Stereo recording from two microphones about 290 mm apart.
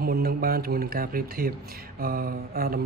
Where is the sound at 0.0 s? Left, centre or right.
Right.